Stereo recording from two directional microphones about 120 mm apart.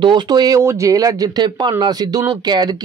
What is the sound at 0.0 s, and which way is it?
Speech, 40° right (ahead or behind).